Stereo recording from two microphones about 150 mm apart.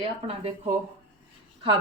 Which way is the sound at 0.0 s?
40° right (ahead or behind).